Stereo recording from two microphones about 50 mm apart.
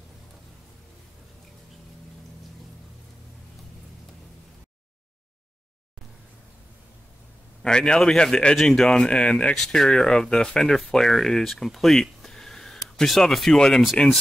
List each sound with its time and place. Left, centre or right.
7.6 s a man's voice: centre